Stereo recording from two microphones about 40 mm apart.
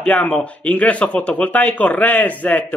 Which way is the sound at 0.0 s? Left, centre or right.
Left.